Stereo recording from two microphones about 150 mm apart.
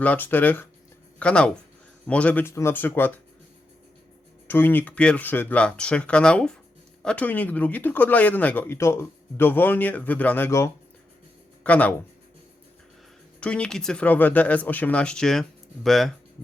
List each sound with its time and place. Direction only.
0.0 s speech: 10° left (ahead or behind)
4.4 s speech: 15° left (ahead or behind)
13.4 s speech: 5° left (ahead or behind)